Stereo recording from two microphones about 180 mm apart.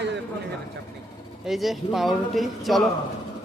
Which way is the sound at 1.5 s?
Centre (ahead or behind).